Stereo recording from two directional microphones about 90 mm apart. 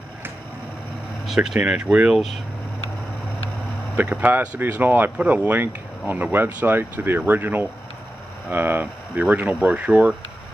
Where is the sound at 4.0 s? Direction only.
15° right (ahead or behind).